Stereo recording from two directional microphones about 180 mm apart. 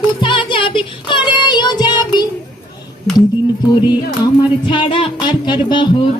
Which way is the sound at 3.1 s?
5° left (ahead or behind).